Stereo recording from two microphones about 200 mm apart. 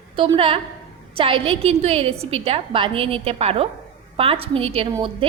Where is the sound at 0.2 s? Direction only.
25° right (ahead or behind).